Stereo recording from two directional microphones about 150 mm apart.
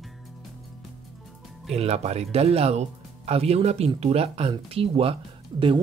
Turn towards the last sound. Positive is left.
turn(degrees=-30)  # may be behind; listen again after turning